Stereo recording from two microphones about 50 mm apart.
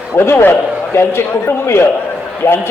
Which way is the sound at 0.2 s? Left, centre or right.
Left.